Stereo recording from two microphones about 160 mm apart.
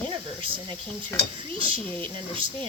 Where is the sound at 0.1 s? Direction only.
30° right (ahead or behind).